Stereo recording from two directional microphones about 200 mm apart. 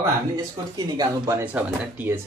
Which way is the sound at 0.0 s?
20° right (ahead or behind).